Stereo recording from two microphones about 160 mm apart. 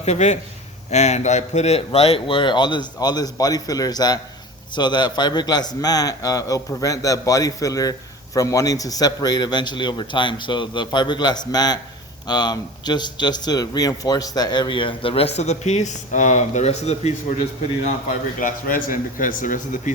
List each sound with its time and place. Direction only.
0.0 s a man's voice: 45° left (ahead or behind)
18.3 s speech: 60° left (ahead or behind)